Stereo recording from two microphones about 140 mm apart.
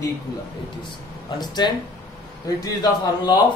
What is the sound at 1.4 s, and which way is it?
Speech, 30° left (ahead or behind).